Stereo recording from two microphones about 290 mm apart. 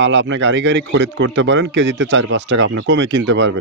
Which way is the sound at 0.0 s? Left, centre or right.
Right.